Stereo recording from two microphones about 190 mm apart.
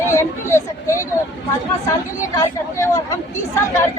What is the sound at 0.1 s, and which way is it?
Speech, 15° left (ahead or behind).